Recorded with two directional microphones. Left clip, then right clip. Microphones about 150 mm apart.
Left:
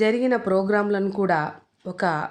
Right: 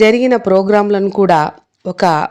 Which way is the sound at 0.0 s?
50° right (ahead or behind).